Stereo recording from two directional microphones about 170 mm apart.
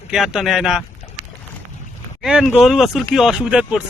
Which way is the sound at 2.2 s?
5° right (ahead or behind).